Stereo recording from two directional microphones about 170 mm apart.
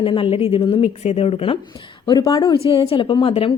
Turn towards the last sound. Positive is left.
turn(degrees=35)  # may be behind; listen again after turning